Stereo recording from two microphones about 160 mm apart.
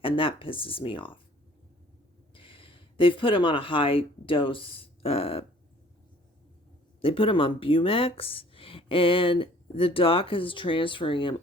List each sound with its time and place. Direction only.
0.0 s speech: 35° left (ahead or behind)
2.3 s speech: 35° left (ahead or behind)
7.0 s speech: 35° left (ahead or behind)